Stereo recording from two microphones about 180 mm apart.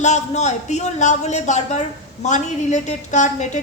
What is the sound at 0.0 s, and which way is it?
A man's voice, 40° left (ahead or behind).